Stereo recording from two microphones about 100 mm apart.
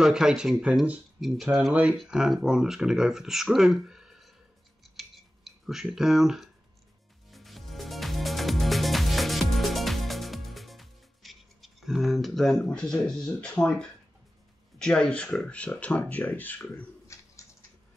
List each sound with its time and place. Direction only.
0.0 s speech: 5° right (ahead or behind)
1.2 s speech: centre (ahead or behind)
1.7 s speech: 15° right (ahead or behind)
4.8 s scissors: centre (ahead or behind)
7.2 s music: centre (ahead or behind)
14.8 s speech: 10° left (ahead or behind)
17.1 s bird: 30° left (ahead or behind)